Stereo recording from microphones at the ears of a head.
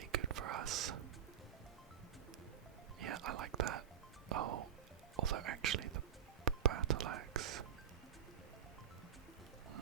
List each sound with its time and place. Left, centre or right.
0.0 s whispering: right
3.0 s whispering: right
4.3 s music: right
5.1 s whispering: right